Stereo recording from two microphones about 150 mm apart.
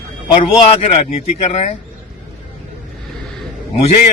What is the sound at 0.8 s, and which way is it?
Speech, 40° left (ahead or behind).